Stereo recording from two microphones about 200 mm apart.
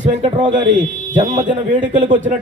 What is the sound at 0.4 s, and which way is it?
Speech, 40° right (ahead or behind).